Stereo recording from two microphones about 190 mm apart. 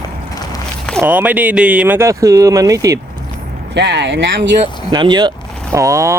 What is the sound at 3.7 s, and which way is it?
Speech, 65° right (ahead or behind).